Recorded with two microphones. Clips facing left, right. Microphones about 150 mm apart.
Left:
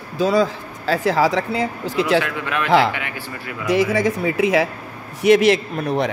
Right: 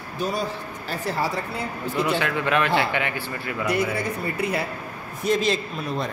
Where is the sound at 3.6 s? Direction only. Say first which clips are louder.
Left 7 dB; 90° left.